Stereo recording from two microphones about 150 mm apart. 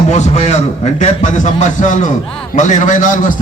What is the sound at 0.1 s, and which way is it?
A man's voice, 50° left (ahead or behind).